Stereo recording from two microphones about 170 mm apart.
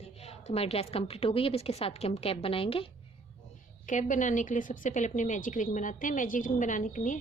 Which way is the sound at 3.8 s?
50° left (ahead or behind).